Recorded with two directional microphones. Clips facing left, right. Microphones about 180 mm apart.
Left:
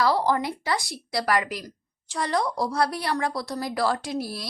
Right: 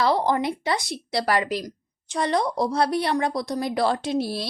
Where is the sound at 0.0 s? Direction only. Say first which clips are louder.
Right 1 dB; 20° right (ahead or behind).